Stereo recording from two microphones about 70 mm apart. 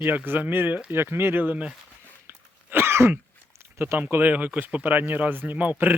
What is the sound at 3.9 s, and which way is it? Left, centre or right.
Speech, right.